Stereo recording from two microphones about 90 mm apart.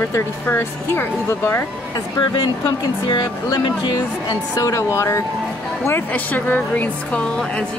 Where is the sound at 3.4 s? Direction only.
50° left (ahead or behind).